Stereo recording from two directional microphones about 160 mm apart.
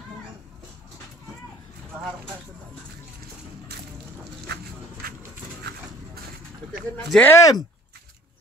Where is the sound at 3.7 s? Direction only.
90° right.